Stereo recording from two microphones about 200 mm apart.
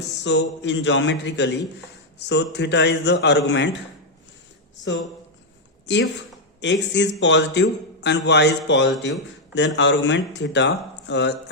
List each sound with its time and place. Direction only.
0.3 s a man's voice: 65° left (ahead or behind)
5.8 s a man's voice: 60° left (ahead or behind)